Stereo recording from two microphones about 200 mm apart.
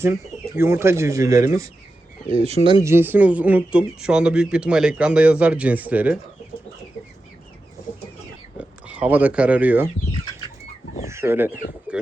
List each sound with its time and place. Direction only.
0.0 s speech: 15° right (ahead or behind)
2.3 s speech: 30° right (ahead or behind)
2.6 s speech: 15° right (ahead or behind)
8.5 s speech: 5° right (ahead or behind)
11.1 s speech: 10° right (ahead or behind)